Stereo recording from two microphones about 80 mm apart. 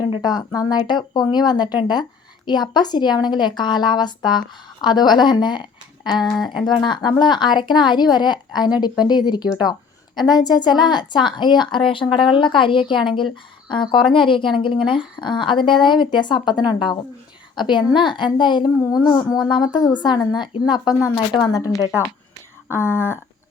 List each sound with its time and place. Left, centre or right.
0.0 s a woman's voice: left
6.3 s speech: centre
6.7 s a woman's voice: left
15.8 s a woman's voice: left
18.8 s a woman's voice: left
21.2 s a woman's voice: left
22.7 s speech: left